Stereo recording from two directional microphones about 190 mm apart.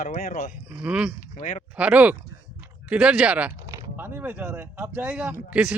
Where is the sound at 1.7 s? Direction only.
5° right (ahead or behind).